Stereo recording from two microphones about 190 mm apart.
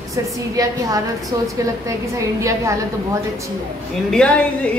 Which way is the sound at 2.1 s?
15° right (ahead or behind).